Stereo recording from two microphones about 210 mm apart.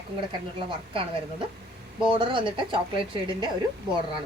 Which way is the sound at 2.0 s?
25° right (ahead or behind).